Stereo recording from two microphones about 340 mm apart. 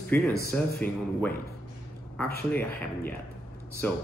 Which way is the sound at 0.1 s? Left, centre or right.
Centre.